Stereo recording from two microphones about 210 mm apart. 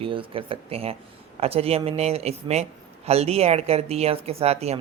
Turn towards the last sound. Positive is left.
turn(degrees=-30)  # may be behind; listen again after turning